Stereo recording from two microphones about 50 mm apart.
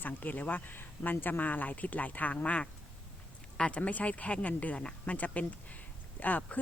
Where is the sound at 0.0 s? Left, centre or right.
Left.